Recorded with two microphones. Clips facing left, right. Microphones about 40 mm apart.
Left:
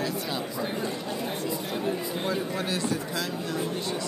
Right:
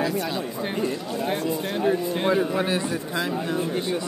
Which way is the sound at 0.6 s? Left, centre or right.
Right.